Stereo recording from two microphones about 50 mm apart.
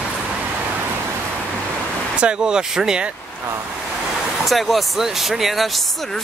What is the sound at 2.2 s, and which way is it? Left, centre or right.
Speech, centre.